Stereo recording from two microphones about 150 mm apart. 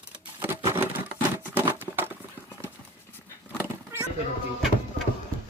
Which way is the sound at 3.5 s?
15° right (ahead or behind).